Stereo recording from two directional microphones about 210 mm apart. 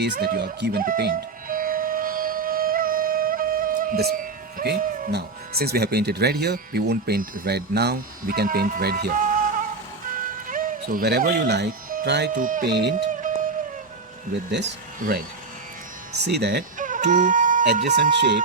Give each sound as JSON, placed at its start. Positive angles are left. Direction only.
{"t": 0.0, "sound": "speech", "side_deg": -50}
{"t": 10.5, "sound": "speech", "side_deg": -40}
{"t": 12.3, "sound": "speech", "side_deg": -40}
{"t": 14.6, "sound": "speech", "side_deg": -40}
{"t": 16.1, "sound": "speech", "side_deg": -55}